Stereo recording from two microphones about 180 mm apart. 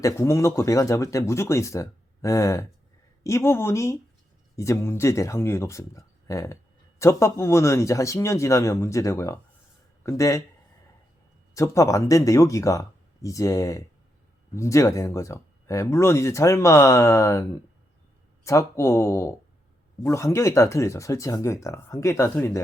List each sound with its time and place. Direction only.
0.0 s speech: 15° left (ahead or behind)
11.5 s speech: 15° left (ahead or behind)
18.4 s speech: 15° left (ahead or behind)